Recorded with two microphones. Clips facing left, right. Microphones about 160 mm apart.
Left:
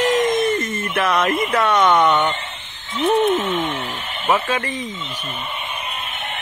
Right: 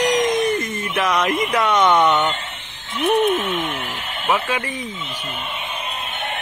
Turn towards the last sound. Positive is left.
turn(degrees=-10)  # may be behind; listen again after turning